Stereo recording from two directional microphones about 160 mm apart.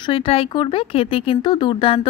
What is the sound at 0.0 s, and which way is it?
Speech, 35° left (ahead or behind).